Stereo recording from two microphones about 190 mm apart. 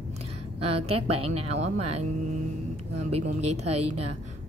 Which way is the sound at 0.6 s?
30° right (ahead or behind).